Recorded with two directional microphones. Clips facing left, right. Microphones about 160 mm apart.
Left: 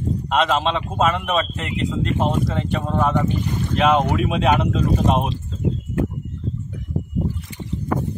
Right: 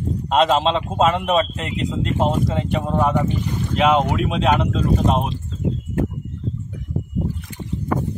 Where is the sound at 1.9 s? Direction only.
20° right (ahead or behind); by 4.6 s 5° left (ahead or behind).